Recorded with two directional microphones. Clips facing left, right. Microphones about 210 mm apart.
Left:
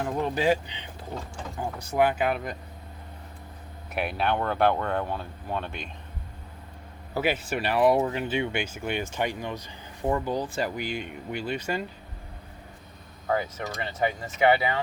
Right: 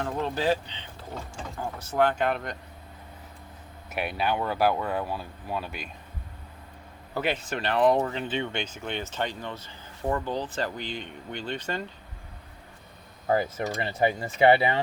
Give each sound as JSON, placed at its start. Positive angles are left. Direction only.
{"t": 0.0, "sound": "speech", "side_deg": 15}
{"t": 3.9, "sound": "speech", "side_deg": 0}
{"t": 7.1, "sound": "speech", "side_deg": 10}
{"t": 13.2, "sound": "speech", "side_deg": -30}